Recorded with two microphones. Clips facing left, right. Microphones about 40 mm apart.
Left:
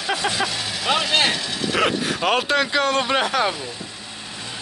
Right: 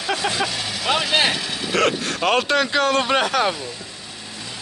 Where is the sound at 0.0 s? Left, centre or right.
Centre.